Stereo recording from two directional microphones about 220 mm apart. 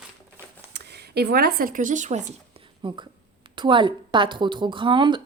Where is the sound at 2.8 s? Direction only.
20° right (ahead or behind).